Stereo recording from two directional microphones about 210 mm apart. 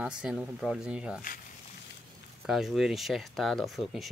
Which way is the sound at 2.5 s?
Centre (ahead or behind).